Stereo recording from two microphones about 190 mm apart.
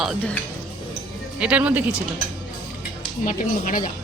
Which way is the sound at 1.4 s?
5° right (ahead or behind).